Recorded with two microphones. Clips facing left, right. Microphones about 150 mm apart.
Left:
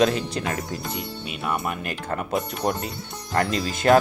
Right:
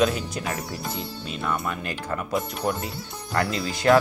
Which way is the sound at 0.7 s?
15° left (ahead or behind).